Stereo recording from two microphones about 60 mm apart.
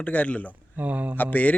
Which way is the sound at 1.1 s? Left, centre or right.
Left.